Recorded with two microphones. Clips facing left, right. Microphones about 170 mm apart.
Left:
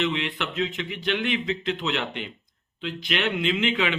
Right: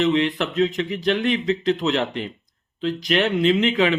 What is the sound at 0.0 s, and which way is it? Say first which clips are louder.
Speech: right 7 dB; 35° right (ahead or behind).